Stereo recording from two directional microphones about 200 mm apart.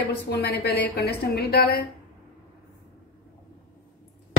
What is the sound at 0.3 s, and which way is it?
A woman's voice, 55° left (ahead or behind).